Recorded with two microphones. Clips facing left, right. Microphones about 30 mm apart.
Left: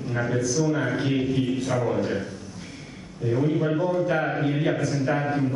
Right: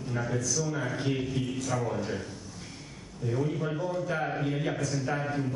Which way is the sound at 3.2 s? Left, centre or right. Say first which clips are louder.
Left 7 dB; left.